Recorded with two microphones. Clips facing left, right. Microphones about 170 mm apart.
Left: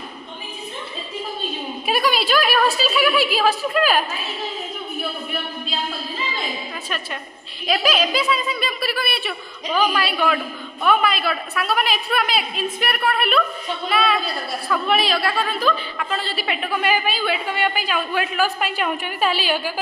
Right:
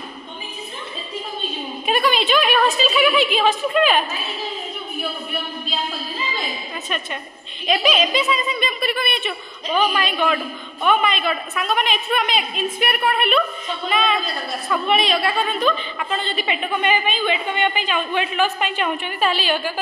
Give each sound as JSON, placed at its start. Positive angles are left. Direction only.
{"t": 1.9, "sound": "a woman's voice", "side_deg": 5}
{"t": 7.6, "sound": "a woman's voice", "side_deg": 0}